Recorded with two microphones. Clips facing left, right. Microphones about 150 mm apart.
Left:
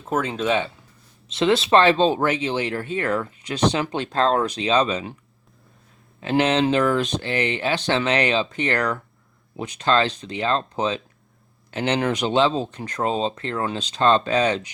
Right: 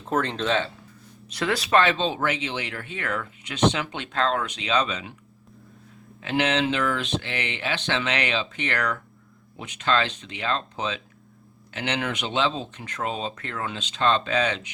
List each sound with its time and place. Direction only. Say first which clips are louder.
0.0 s speech: left 2 dB; 5° left (ahead or behind)
1.3 s speech: left 5 dB; 25° left (ahead or behind)
6.1 s speech: left 4 dB; 35° left (ahead or behind)